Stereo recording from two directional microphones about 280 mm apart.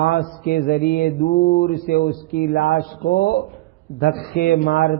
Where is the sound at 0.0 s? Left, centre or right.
Left.